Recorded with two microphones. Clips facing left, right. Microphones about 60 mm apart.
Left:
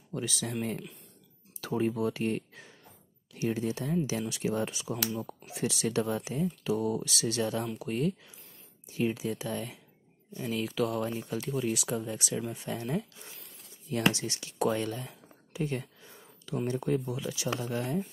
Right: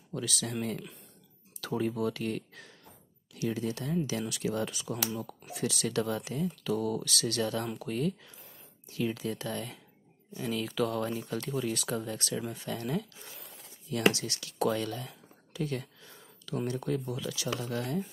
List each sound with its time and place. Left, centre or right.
0.1 s speech: left
1.6 s speech: left; by 8.4 s centre
8.8 s a sound: left
9.1 s speech: centre
14.1 s a sound: left
16.6 s speech: left